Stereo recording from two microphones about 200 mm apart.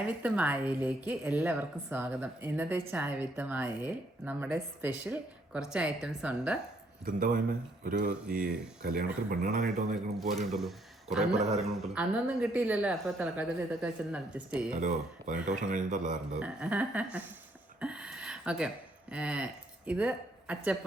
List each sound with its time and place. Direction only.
0.2 s a woman's voice: 5° right (ahead or behind)
7.0 s speech: 40° right (ahead or behind)
9.3 s speech: 50° right (ahead or behind)
10.2 s speech: centre (ahead or behind)
11.3 s a man's voice: 35° right (ahead or behind)
11.6 s a woman's voice: centre (ahead or behind)
14.8 s a man's voice: 40° right (ahead or behind)
16.4 s a woman's voice: 5° right (ahead or behind)
17.7 s a sound: 5° right (ahead or behind)
19.1 s speech: 5° right (ahead or behind)